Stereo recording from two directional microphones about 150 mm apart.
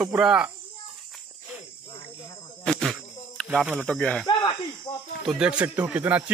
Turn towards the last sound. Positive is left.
turn(degrees=-10)  # may be behind; listen again after turning